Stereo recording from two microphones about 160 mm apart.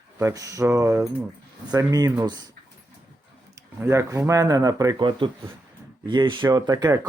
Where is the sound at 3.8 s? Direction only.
20° right (ahead or behind).